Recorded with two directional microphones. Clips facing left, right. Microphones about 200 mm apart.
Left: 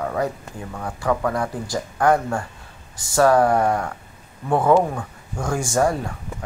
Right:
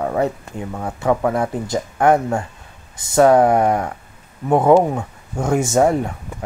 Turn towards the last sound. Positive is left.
turn(degrees=-20)  # may be behind; listen again after turning